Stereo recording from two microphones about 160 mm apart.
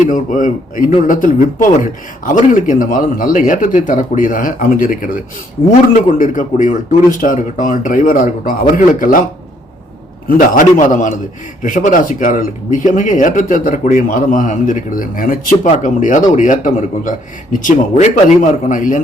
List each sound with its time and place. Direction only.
0.0 s a man's voice: 55° left (ahead or behind)
6.1 s a man's voice: 55° left (ahead or behind)
10.2 s a man's voice: 60° left (ahead or behind)